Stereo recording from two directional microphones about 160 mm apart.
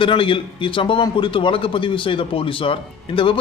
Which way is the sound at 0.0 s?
30° left (ahead or behind).